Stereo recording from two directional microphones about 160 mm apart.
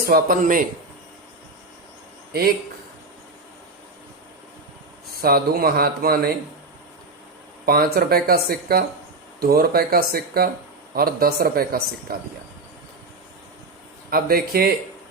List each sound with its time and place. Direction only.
0.1 s speech: 60° right (ahead or behind)
2.3 s speech: 75° right (ahead or behind)
5.2 s speech: 70° right (ahead or behind)
7.6 s speech: 70° right (ahead or behind)
14.1 s speech: 70° right (ahead or behind)